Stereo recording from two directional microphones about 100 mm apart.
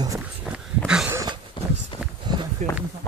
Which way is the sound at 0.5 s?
10° right (ahead or behind).